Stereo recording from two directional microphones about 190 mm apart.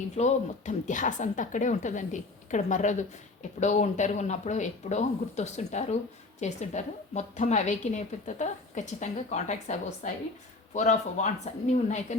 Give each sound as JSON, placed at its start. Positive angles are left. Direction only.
{"t": 0.2, "sound": "a woman's voice", "side_deg": 40}